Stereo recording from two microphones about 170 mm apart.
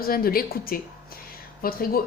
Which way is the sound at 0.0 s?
60° left (ahead or behind).